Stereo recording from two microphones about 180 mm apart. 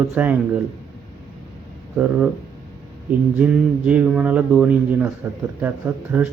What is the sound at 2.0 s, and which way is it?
Speech, 5° right (ahead or behind).